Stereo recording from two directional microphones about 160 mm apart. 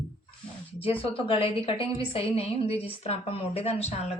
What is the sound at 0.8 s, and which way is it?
A woman's voice, 35° left (ahead or behind).